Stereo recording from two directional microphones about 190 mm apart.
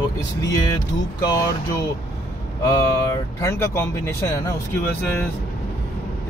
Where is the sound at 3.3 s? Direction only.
15° left (ahead or behind).